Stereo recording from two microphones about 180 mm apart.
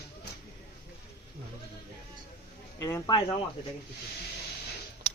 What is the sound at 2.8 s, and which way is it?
Speech, 15° left (ahead or behind).